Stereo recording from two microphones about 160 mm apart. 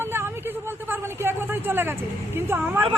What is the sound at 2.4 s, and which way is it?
Speech, 15° right (ahead or behind).